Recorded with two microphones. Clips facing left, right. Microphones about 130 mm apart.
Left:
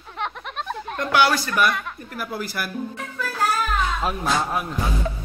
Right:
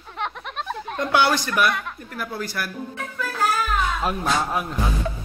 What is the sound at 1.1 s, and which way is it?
Speech, 25° right (ahead or behind).